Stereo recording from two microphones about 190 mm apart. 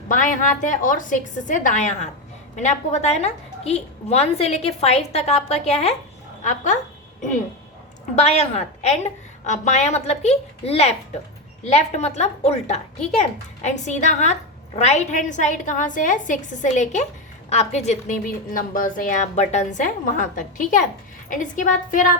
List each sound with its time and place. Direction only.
0.1 s a woman's voice: 45° left (ahead or behind)
8.1 s a woman's voice: 35° left (ahead or behind)